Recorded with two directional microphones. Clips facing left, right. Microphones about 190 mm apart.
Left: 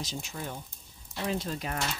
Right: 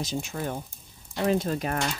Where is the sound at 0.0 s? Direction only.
50° right (ahead or behind).